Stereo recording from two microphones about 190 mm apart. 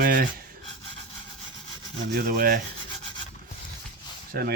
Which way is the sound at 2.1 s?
50° right (ahead or behind).